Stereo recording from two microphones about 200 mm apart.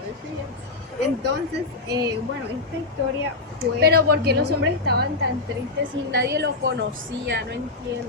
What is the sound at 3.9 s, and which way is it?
A woman's voice, 50° right (ahead or behind).